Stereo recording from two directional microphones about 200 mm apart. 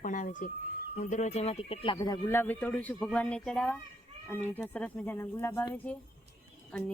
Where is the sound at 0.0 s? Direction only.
40° left (ahead or behind).